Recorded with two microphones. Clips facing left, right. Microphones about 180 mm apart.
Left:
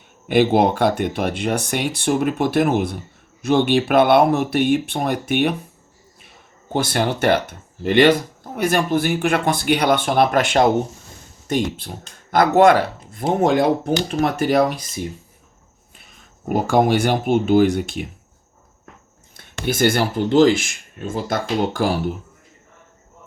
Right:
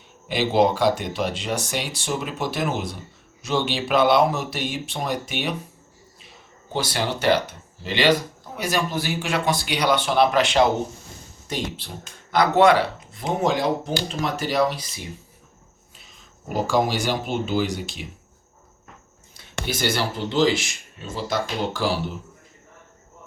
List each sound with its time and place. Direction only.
0.3 s speech: 55° left (ahead or behind)
6.7 s speech: 55° left (ahead or behind)
16.0 s speech: 55° left (ahead or behind)
19.4 s speech: 50° left (ahead or behind)